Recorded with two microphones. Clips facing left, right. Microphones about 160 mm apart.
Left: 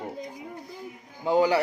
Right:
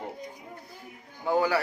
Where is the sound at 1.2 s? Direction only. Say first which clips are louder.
Left 3 dB; 20° left (ahead or behind).